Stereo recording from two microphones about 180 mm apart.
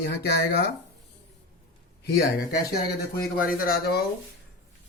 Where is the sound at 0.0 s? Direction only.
60° left (ahead or behind).